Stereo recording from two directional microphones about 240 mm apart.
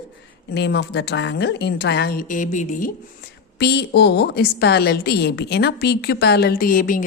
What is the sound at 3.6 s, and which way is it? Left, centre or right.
Speech, left.